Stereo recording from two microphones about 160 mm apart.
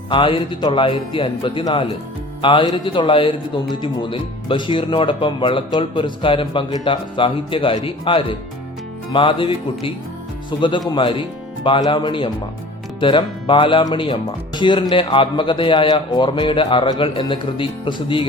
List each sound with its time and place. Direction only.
0.1 s speech: 30° left (ahead or behind)